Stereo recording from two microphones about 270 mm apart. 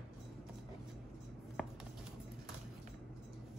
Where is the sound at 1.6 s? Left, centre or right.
Centre.